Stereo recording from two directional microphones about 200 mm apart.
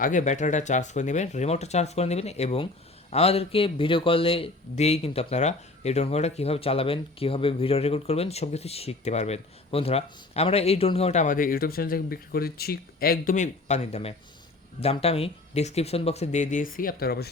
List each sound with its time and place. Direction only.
0.0 s speech: 40° left (ahead or behind)